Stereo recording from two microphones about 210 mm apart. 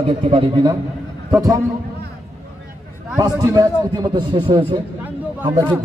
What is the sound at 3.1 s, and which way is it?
A man's voice, 15° right (ahead or behind).